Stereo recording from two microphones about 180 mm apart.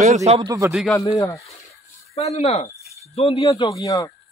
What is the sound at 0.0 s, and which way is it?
Speech, 40° right (ahead or behind).